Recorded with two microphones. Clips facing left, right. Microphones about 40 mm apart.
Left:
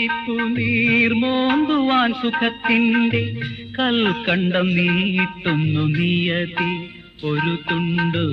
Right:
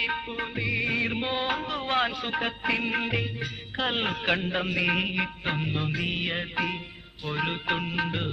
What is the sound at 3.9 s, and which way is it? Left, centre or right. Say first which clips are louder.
Music: left 7 dB; left.